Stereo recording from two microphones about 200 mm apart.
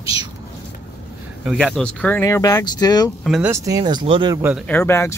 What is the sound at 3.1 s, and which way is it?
Speech, 5° right (ahead or behind).